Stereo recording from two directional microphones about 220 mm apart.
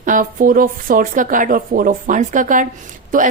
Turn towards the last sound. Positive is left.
turn(degrees=-35)  # may be behind; listen again after turning